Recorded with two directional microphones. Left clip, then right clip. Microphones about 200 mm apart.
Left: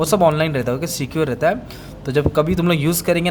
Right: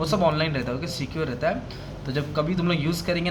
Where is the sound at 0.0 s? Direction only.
45° left (ahead or behind).